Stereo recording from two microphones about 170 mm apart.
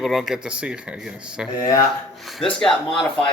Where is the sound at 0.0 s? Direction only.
Centre (ahead or behind).